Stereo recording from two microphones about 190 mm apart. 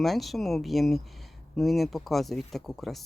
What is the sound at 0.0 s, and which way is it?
Speech, centre (ahead or behind).